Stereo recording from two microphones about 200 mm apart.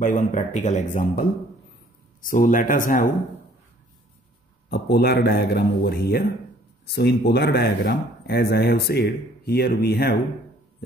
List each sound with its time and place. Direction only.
0.0 s speech: 40° left (ahead or behind)
2.2 s speech: 40° left (ahead or behind)
4.6 s speech: 55° left (ahead or behind)